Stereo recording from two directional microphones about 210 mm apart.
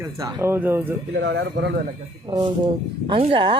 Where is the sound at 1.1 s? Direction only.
55° right (ahead or behind).